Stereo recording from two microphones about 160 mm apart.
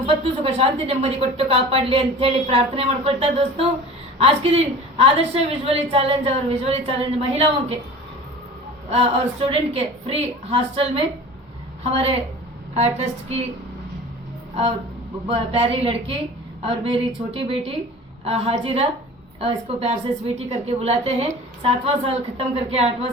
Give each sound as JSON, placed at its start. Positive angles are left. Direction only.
{"t": 0.0, "sound": "a woman's voice", "side_deg": -35}
{"t": 9.5, "sound": "a woman's voice", "side_deg": -35}
{"t": 15.3, "sound": "a woman's voice", "side_deg": -35}